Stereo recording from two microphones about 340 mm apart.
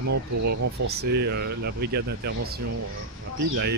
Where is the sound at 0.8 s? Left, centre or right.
Right.